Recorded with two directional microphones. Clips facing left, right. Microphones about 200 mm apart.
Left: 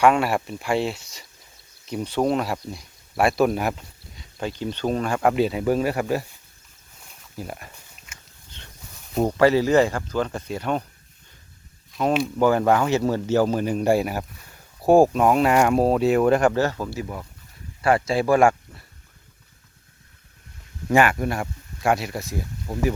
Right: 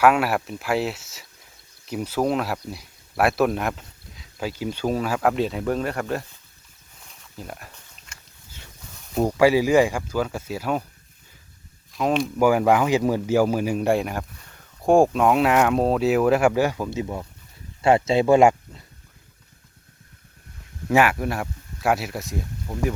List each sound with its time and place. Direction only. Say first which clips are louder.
0.0 s speech: even; 5° right (ahead or behind)
7.3 s a sound: left 3 dB; centre (ahead or behind)
8.4 s dog: even; 5° right (ahead or behind)
9.1 s speech: even; 10° right (ahead or behind)
11.9 s speech: even; centre (ahead or behind)
12.4 s speech: right 1 dB; 10° right (ahead or behind)
20.9 s speech: even; 5° right (ahead or behind)